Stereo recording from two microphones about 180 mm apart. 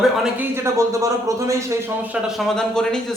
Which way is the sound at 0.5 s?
15° right (ahead or behind).